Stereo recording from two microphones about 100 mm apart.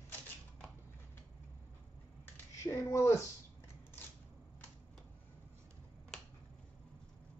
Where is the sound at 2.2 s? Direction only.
25° left (ahead or behind).